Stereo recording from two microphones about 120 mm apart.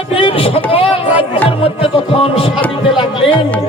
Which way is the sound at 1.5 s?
50° left (ahead or behind).